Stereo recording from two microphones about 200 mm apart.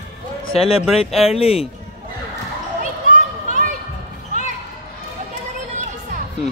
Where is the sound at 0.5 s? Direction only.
30° left (ahead or behind).